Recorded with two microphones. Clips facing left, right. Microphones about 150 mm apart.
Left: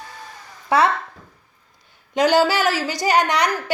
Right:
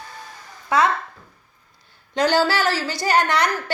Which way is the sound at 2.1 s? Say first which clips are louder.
Left 2 dB; 15° left (ahead or behind).